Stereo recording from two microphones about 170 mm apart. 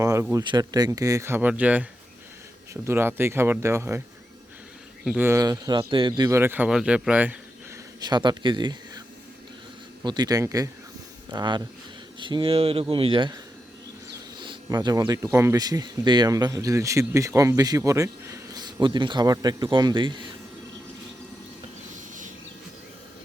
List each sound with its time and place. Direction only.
0.0 s speech: 20° right (ahead or behind)
5.0 s speech: 10° right (ahead or behind)
8.0 s speech: 25° right (ahead or behind)
10.0 s speech: 25° right (ahead or behind)